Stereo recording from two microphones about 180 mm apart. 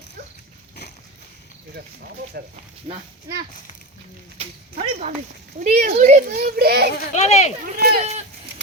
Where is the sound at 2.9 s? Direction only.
35° right (ahead or behind).